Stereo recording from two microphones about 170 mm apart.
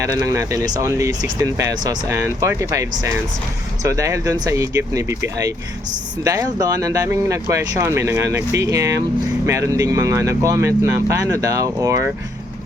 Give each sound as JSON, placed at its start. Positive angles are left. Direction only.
{"t": 0.0, "sound": "speech", "side_deg": -20}
{"t": 3.8, "sound": "speech", "side_deg": -20}